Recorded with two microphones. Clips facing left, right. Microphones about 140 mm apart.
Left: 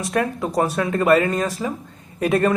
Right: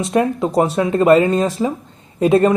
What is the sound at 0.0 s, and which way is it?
A woman's voice, 20° right (ahead or behind).